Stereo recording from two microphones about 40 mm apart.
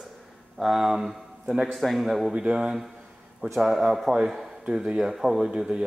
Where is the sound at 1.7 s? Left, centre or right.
Centre.